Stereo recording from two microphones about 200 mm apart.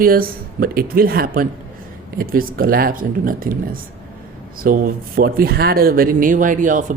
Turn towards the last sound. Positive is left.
turn(degrees=-40)  # may be behind; listen again after turning